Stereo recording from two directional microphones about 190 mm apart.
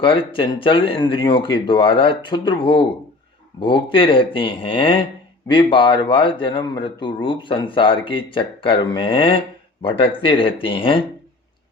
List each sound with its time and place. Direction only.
0.0 s speech: 30° left (ahead or behind)